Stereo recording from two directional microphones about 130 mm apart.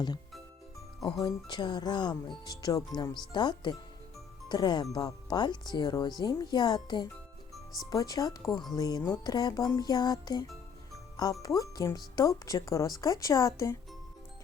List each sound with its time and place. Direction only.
1.2 s speech: 35° left (ahead or behind)
7.5 s music: centre (ahead or behind)
7.9 s speech: 30° left (ahead or behind)
10.9 s music: 30° left (ahead or behind)
11.4 s speech: 30° left (ahead or behind)